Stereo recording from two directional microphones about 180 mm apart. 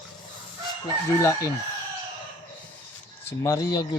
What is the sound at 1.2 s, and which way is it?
Chicken, 15° left (ahead or behind).